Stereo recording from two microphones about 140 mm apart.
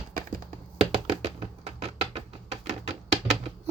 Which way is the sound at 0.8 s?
45° right (ahead or behind).